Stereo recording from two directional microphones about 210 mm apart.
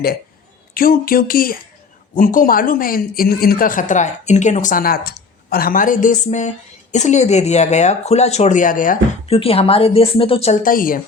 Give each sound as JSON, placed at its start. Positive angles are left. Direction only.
{"t": 0.7, "sound": "a woman's voice", "side_deg": 45}
{"t": 9.2, "sound": "a woman's voice", "side_deg": 25}